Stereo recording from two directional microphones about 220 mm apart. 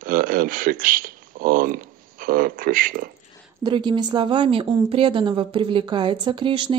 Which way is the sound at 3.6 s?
20° right (ahead or behind).